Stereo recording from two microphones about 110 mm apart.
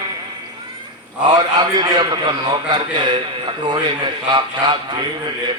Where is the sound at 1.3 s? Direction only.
40° right (ahead or behind).